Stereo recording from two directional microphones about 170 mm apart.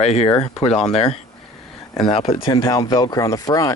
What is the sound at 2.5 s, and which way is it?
Speech, 20° left (ahead or behind).